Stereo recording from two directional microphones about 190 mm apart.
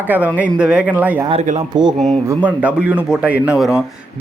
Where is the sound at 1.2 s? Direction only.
30° right (ahead or behind).